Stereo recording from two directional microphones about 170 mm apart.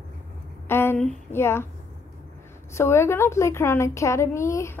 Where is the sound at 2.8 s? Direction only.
15° left (ahead or behind).